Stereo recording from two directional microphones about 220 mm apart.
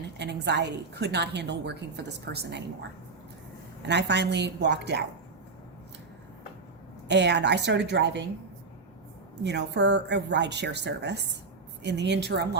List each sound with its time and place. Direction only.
0.2 s a woman's voice: 50° right (ahead or behind)
3.8 s a woman's voice: 50° right (ahead or behind)
7.1 s a woman's voice: 50° right (ahead or behind)
9.4 s a woman's voice: 50° right (ahead or behind)